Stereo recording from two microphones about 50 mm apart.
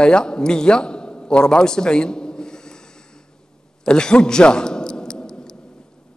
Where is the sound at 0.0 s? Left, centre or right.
Centre.